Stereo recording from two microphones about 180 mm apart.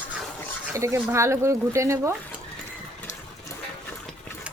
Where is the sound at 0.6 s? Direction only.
15° right (ahead or behind).